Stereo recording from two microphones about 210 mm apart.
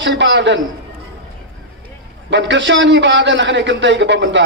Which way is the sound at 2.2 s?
60° right (ahead or behind).